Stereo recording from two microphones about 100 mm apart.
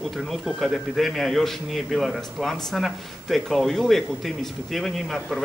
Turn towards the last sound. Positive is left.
turn(degrees=0)  # may be behind; listen again after turning